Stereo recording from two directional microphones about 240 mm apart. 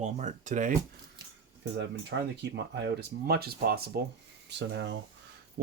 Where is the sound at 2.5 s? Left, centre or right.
Right.